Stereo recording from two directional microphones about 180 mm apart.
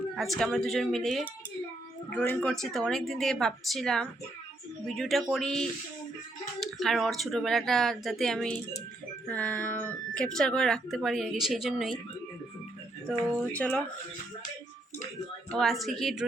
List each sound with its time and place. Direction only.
0.2 s speech: centre (ahead or behind)
13.1 s speech: 5° left (ahead or behind)
15.4 s speech: centre (ahead or behind)